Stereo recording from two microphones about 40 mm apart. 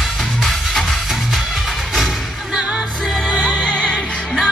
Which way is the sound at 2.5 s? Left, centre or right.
Right.